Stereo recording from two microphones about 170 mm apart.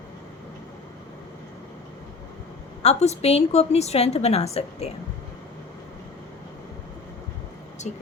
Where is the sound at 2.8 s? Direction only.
40° left (ahead or behind).